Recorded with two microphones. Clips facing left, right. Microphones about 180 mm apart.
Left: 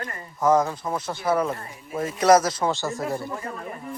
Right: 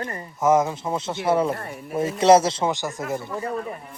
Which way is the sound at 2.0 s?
25° right (ahead or behind).